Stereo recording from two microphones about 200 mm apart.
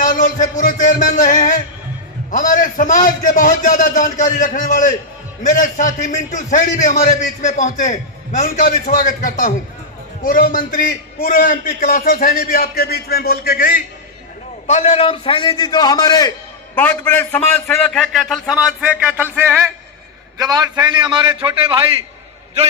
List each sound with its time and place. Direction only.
0.0 s a man's voice: 40° left (ahead or behind)
14.7 s a man's voice: 30° left (ahead or behind)
16.7 s a man's voice: 10° left (ahead or behind); by 21.8 s 25° right (ahead or behind)